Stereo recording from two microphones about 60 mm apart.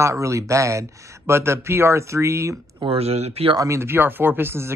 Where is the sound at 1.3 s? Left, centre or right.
Right.